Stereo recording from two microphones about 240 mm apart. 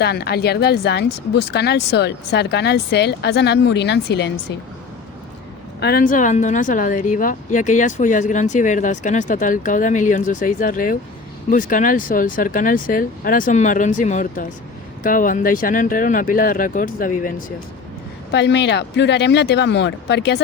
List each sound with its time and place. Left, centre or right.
0.0 s speech: left
5.8 s speech: left
18.3 s speech: left